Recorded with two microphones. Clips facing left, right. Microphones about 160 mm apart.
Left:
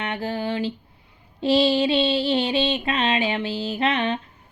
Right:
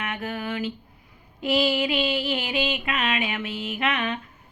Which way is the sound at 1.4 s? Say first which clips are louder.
Left 4 dB; 30° left (ahead or behind).